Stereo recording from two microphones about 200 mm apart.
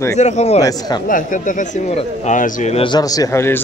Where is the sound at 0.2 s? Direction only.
35° left (ahead or behind).